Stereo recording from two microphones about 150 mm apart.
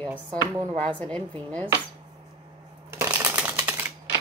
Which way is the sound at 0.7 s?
40° right (ahead or behind).